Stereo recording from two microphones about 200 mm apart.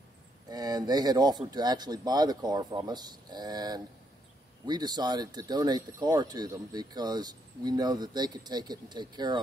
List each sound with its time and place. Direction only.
0.5 s speech: 20° right (ahead or behind)